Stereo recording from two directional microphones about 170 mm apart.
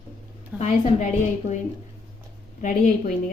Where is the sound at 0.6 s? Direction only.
40° left (ahead or behind).